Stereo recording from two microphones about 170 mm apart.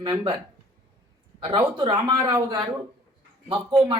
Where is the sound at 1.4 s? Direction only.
30° right (ahead or behind).